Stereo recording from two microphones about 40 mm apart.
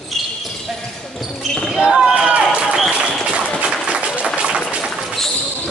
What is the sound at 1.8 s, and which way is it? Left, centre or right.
Basketball bounce, centre.